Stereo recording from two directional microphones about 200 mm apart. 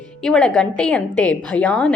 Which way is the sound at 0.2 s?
5° left (ahead or behind).